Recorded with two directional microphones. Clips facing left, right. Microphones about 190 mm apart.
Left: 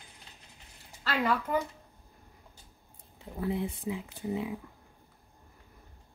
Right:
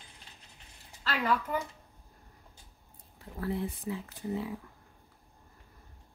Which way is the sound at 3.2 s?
20° left (ahead or behind).